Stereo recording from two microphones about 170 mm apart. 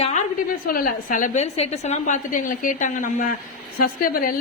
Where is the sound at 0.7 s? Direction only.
50° left (ahead or behind).